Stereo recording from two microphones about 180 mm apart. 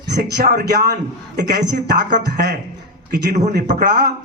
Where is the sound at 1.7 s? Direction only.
45° right (ahead or behind).